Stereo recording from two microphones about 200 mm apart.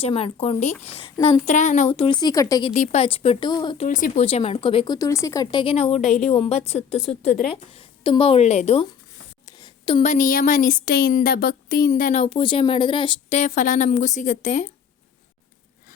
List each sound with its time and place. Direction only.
0.0 s a woman's voice: 30° left (ahead or behind)
2.7 s a woman's voice: 35° left (ahead or behind)
3.8 s a woman's voice: 40° left (ahead or behind)
4.9 s a woman's voice: 15° left (ahead or behind)
5.9 s a woman's voice: centre (ahead or behind)
6.3 s a woman's voice: 30° left (ahead or behind)
9.5 s speech: 20° left (ahead or behind)
13.4 s speech: 35° left (ahead or behind)